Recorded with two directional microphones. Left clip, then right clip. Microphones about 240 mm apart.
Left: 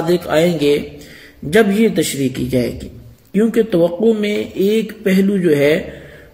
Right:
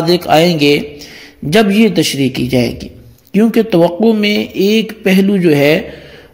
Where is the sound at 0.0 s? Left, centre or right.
Right.